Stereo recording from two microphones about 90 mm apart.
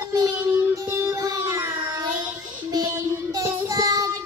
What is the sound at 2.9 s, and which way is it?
Child singing, 40° right (ahead or behind).